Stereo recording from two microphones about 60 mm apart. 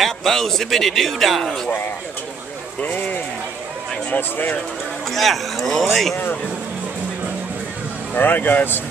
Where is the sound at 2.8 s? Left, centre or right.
Left.